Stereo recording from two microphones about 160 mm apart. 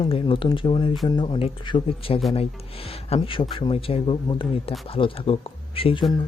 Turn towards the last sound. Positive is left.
turn(degrees=35)  # may be behind; listen again after turning